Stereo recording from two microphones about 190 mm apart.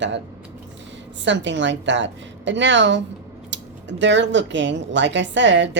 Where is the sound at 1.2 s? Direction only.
70° right (ahead or behind).